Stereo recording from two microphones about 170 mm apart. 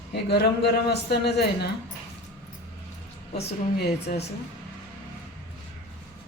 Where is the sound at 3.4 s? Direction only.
70° left (ahead or behind).